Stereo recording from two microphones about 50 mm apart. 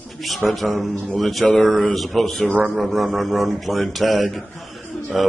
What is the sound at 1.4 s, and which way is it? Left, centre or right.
Speech, centre.